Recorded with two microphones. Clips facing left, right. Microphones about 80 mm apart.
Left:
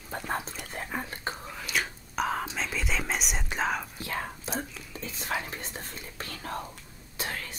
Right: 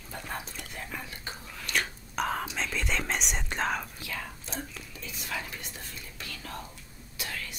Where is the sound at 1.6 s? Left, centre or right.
Centre.